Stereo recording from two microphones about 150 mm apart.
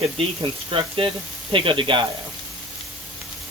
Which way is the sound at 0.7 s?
35° right (ahead or behind).